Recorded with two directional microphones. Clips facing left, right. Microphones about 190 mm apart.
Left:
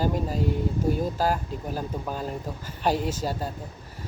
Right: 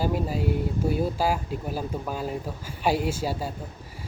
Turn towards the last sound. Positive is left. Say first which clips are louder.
# right 1 dB
turn(degrees=-10)  # may be behind; listen again after turning